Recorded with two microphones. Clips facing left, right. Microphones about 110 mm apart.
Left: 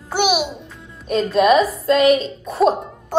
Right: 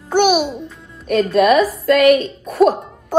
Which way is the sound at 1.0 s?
30° left (ahead or behind).